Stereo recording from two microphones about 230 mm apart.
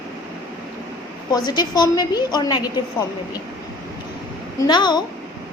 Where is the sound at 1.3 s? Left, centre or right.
Centre.